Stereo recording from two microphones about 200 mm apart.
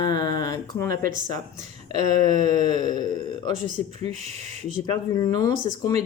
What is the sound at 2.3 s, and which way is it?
Speech, 20° left (ahead or behind).